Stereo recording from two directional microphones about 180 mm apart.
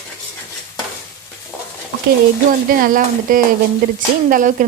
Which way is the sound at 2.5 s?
50° right (ahead or behind).